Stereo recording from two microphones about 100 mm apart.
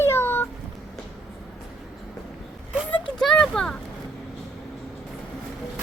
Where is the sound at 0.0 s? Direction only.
25° left (ahead or behind).